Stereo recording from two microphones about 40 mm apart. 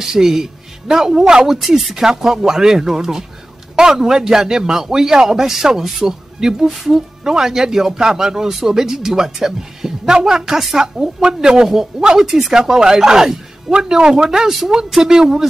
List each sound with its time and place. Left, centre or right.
0.0 s a man's voice: centre
6.7 s speech: centre
7.2 s speech: centre